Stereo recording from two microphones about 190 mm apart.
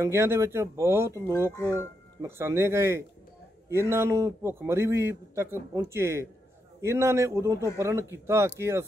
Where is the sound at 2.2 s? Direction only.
15° right (ahead or behind).